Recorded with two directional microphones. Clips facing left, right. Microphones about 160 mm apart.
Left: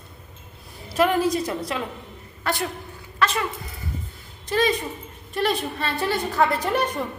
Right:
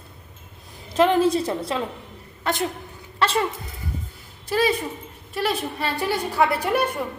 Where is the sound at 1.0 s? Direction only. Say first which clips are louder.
Right 2 dB; 25° right (ahead or behind).